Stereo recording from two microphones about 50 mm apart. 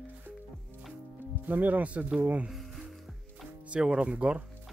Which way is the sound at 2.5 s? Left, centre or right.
Centre.